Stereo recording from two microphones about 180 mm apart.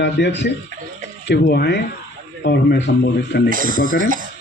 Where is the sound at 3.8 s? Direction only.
50° left (ahead or behind).